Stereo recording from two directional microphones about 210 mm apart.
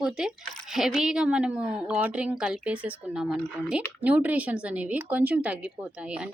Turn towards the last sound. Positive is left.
turn(degrees=-5)  # may be behind; listen again after turning